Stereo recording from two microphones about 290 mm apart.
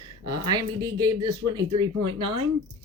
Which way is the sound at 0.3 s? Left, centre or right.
Centre.